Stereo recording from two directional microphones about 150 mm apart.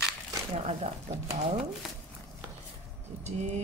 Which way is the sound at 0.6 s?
50° right (ahead or behind).